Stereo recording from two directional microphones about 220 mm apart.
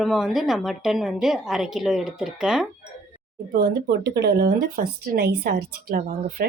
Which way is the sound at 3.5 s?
50° right (ahead or behind).